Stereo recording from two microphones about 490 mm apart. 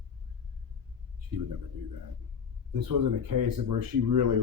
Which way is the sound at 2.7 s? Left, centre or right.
Right.